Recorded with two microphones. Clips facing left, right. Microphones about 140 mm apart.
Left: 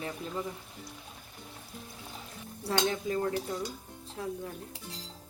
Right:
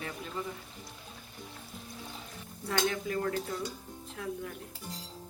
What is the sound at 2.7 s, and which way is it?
A woman's voice, 25° left (ahead or behind).